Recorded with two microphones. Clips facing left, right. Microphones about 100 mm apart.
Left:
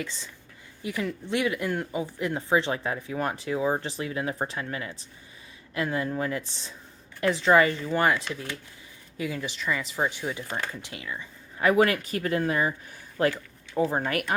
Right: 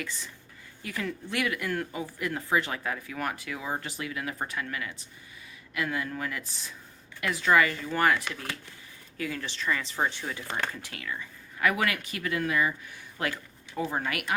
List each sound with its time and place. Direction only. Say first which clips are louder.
0.0 s speech: left 2 dB; 20° left (ahead or behind); by 14.3 s 35° left (ahead or behind)